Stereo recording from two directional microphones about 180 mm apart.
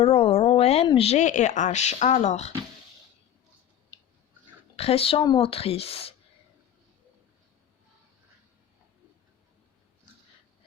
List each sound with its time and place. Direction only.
0.0 s a sound: 30° left (ahead or behind)
0.9 s speech: 30° left (ahead or behind)
4.8 s speech: 35° left (ahead or behind)